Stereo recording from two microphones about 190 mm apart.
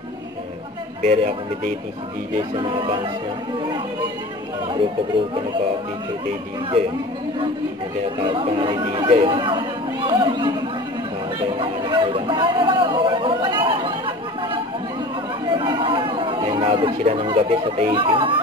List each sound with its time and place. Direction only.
1.0 s a man's voice: 35° right (ahead or behind)
2.3 s speech: 25° right (ahead or behind)
8.2 s speech: 25° right (ahead or behind)
11.5 s speech: 25° right (ahead or behind)
15.4 s chatter: 25° right (ahead or behind)
17.9 s speech: 25° right (ahead or behind)